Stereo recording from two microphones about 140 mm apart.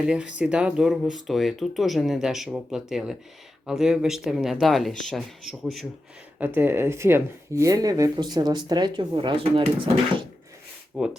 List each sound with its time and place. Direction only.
0.0 s speech: 5° right (ahead or behind)
6.4 s speech: 15° right (ahead or behind); by 10.2 s 35° right (ahead or behind)
10.9 s speech: 5° right (ahead or behind)